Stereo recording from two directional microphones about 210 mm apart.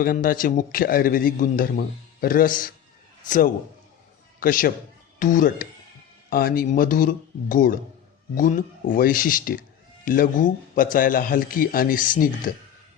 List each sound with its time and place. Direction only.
0.0 s a man's voice: 40° left (ahead or behind)